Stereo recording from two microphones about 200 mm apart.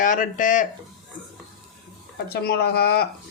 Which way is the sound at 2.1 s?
50° left (ahead or behind).